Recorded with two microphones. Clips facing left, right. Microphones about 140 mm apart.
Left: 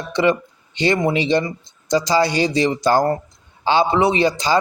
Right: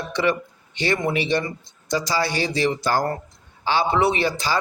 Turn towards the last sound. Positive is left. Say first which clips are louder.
# left 4 dB
turn(degrees=20)  # may be behind; listen again after turning